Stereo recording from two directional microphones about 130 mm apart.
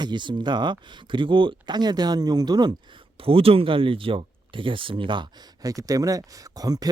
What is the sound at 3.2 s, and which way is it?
Speech, 45° right (ahead or behind).